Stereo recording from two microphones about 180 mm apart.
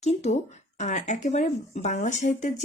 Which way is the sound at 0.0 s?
40° left (ahead or behind).